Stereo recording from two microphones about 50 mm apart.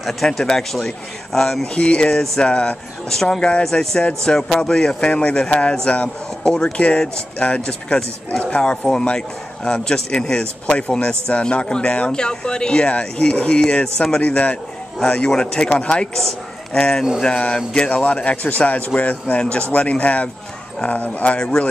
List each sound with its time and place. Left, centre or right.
0.0 s a man's voice: centre
10.4 s a man's voice: left